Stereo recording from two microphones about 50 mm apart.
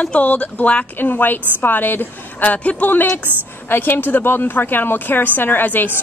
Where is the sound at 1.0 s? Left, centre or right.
Left.